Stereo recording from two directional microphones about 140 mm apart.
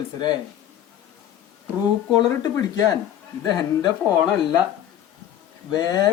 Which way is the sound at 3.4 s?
30° left (ahead or behind).